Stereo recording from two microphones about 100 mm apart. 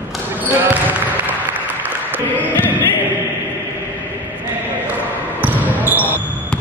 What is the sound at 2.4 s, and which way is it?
Choir, 20° left (ahead or behind).